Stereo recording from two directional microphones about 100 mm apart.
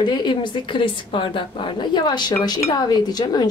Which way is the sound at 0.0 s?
50° left (ahead or behind).